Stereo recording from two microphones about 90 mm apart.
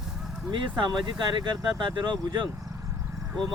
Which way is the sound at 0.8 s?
55° right (ahead or behind).